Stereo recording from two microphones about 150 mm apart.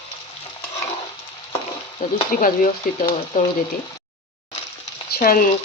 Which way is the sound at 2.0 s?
65° left (ahead or behind).